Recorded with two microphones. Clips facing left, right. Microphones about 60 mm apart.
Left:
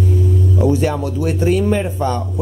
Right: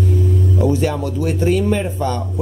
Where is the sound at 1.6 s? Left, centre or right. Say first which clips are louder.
Left 1 dB; centre.